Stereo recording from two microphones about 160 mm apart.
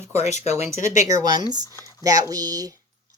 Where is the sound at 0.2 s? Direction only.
45° left (ahead or behind).